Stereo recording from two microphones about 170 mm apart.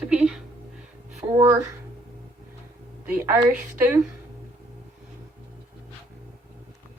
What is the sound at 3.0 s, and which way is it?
Speech, 15° right (ahead or behind).